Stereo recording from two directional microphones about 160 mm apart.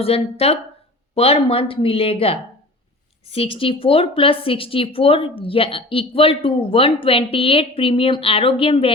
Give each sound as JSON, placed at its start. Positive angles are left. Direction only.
{"t": 0.0, "sound": "a woman's voice", "side_deg": 40}